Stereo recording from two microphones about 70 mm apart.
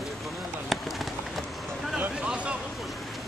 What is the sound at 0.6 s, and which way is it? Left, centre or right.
Run, centre.